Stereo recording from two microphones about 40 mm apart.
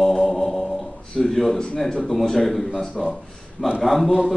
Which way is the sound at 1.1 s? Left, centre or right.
Centre.